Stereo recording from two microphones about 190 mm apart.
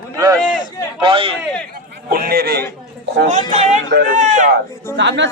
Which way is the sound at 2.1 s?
50° right (ahead or behind).